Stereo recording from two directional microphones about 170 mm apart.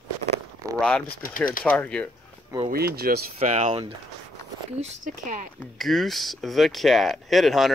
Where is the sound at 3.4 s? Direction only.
40° right (ahead or behind).